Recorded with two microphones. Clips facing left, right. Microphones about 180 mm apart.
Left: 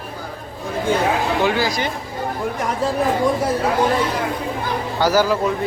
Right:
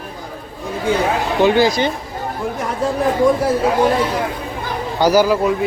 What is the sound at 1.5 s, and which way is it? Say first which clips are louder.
Speech: right 6 dB; 25° right (ahead or behind).